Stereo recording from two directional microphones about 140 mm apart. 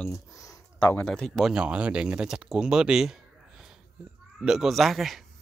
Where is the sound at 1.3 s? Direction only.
5° right (ahead or behind).